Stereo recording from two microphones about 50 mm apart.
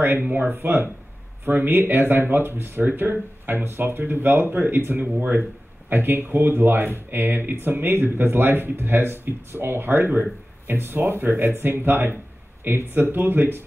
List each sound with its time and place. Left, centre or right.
0.2 s speech: right